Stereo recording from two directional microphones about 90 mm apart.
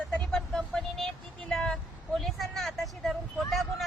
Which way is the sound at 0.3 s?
5° left (ahead or behind).